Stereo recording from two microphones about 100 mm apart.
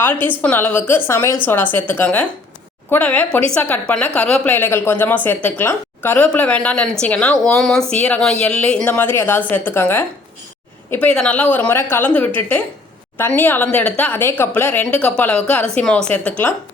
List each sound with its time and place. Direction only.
0.0 s a woman's voice: 20° left (ahead or behind)
4.5 s a woman's voice: 25° left (ahead or behind)